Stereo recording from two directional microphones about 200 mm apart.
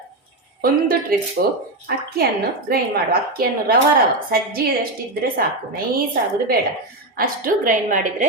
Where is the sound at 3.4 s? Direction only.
45° right (ahead or behind).